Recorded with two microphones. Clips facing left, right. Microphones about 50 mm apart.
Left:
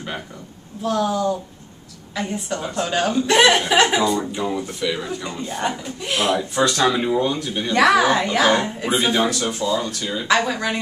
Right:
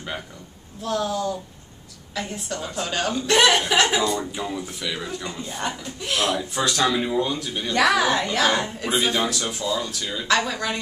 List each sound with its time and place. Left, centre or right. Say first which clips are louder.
0.8 s a man's voice: left 4 dB; centre
4.7 s speech: left 5 dB; centre
6.5 s speech: left 5 dB; centre
6.8 s a man's voice: left 3 dB; centre